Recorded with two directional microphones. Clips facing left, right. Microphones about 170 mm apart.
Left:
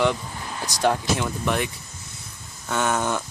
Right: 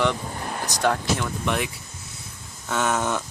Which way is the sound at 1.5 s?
Centre (ahead or behind).